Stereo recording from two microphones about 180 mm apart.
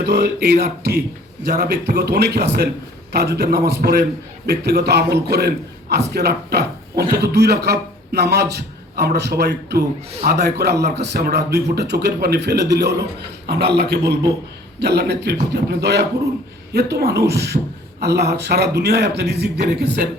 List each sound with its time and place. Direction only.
0.0 s a man's voice: 65° right (ahead or behind)